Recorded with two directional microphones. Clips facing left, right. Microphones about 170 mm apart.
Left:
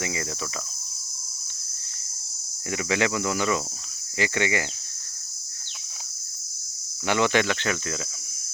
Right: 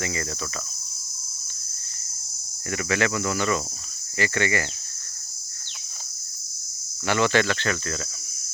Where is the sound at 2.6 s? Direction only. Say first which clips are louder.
Even; 15° left (ahead or behind).